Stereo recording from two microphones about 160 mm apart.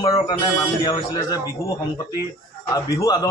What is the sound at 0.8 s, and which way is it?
Speech, 25° left (ahead or behind).